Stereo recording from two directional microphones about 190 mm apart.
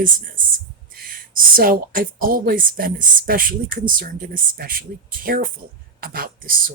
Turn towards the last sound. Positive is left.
turn(degrees=-50)  # may be behind; listen again after turning